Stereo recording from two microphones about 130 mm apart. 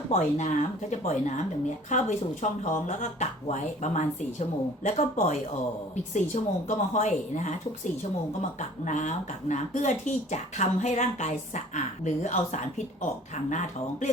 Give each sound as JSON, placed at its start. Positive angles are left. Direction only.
{"t": 0.1, "sound": "speech", "side_deg": 60}